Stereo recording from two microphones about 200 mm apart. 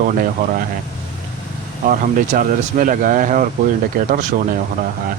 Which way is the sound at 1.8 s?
40° right (ahead or behind).